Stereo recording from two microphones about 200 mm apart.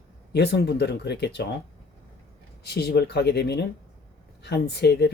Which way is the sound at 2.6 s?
55° left (ahead or behind).